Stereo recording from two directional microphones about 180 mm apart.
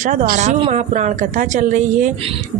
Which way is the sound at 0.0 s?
45° right (ahead or behind).